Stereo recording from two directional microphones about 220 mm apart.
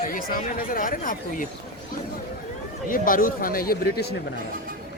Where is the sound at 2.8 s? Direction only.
40° left (ahead or behind).